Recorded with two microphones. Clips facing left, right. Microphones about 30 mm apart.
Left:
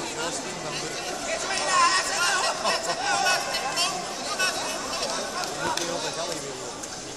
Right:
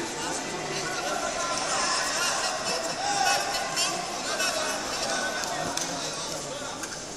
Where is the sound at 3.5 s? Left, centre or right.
Centre.